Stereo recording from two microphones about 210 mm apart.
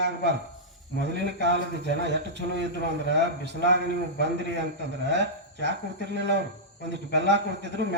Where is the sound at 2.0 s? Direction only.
55° right (ahead or behind).